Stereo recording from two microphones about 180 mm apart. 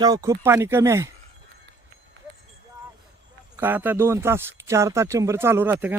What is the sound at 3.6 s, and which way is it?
Speech, 10° right (ahead or behind).